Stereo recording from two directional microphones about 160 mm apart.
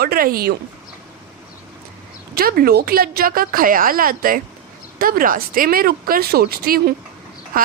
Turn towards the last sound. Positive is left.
turn(degrees=-65)  # may be behind; listen again after turning